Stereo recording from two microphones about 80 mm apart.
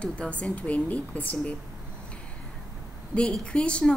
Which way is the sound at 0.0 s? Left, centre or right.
Centre.